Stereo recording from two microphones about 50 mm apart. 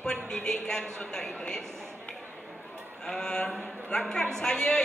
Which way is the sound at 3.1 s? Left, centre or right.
Centre.